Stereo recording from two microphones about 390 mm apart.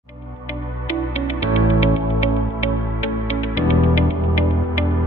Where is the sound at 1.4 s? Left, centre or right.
Centre.